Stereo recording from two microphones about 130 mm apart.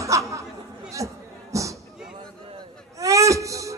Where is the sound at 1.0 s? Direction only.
25° right (ahead or behind).